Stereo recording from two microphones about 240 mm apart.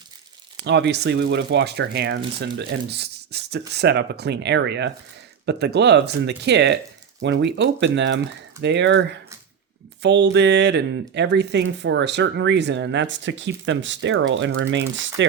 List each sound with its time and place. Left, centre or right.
0.6 s speech: right